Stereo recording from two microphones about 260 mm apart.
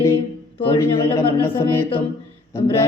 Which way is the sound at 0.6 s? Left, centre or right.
Centre.